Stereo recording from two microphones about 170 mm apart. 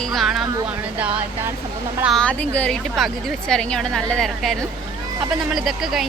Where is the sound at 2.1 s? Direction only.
5° left (ahead or behind).